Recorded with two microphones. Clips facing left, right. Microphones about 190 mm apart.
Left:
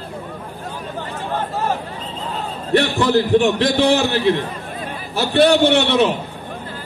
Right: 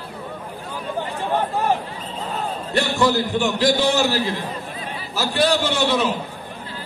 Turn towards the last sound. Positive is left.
turn(degrees=65)  # may be behind; listen again after turning